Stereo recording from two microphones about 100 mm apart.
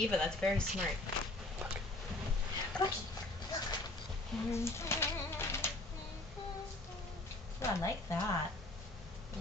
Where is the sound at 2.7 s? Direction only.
10° left (ahead or behind).